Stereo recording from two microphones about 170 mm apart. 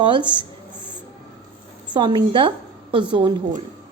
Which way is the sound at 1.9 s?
25° right (ahead or behind).